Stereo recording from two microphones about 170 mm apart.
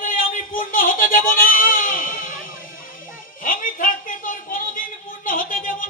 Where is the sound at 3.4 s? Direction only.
55° left (ahead or behind).